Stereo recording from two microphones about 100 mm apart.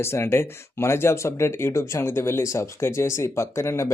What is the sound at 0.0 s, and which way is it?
Speech, 25° left (ahead or behind).